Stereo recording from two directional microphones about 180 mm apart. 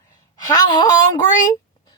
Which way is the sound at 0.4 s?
20° left (ahead or behind).